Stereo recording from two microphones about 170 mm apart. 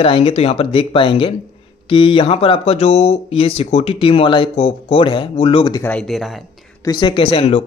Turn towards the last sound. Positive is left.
turn(degrees=35)  # may be behind; listen again after turning